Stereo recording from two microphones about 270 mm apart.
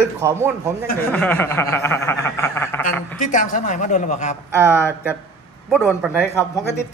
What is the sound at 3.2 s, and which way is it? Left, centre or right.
A man's voice, left.